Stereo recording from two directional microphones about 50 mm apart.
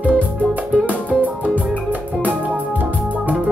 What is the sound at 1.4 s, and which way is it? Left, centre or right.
Music, right.